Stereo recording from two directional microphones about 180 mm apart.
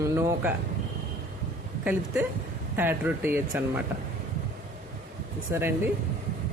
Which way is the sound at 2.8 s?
10° right (ahead or behind).